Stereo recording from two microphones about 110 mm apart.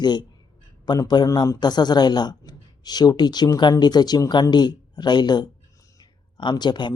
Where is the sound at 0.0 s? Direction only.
40° left (ahead or behind).